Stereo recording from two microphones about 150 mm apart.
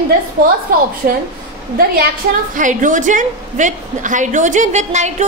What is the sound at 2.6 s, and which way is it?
A woman's voice, 60° right (ahead or behind).